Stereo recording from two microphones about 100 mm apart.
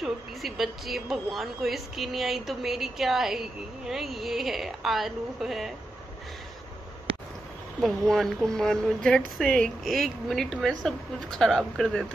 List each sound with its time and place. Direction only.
0.0 s speech: centre (ahead or behind)
7.1 s a sound: 65° right (ahead or behind)
7.8 s speech: centre (ahead or behind)